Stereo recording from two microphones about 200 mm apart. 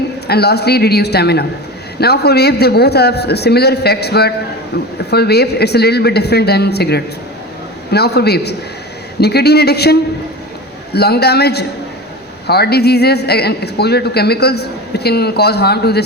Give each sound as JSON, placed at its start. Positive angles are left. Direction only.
{"t": 0.3, "sound": "a woman's voice", "side_deg": 55}